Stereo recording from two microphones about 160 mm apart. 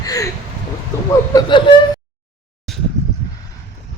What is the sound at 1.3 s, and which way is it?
Speech, 30° left (ahead or behind).